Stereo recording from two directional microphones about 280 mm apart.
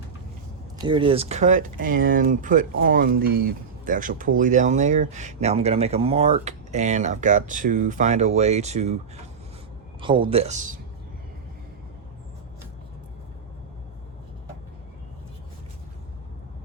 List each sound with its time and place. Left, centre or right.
0.9 s speech: centre
10.0 s speech: centre